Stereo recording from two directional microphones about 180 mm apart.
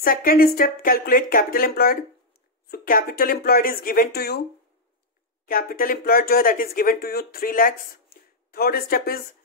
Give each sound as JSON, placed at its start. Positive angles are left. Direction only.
{"t": 0.0, "sound": "speech", "side_deg": 55}
{"t": 5.5, "sound": "speech", "side_deg": 55}